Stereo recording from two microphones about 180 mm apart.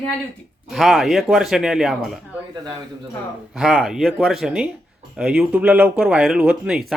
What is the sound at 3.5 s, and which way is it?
Speech, 5° right (ahead or behind).